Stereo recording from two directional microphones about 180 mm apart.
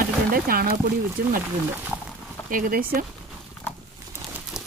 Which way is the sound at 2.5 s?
50° right (ahead or behind).